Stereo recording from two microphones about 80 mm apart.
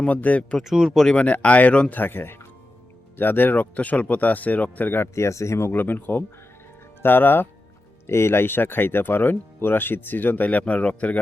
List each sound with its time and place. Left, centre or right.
0.0 s a man's voice: centre
0.6 s speech: centre
0.9 s speech: centre
5.1 s speech: left; by 11.2 s centre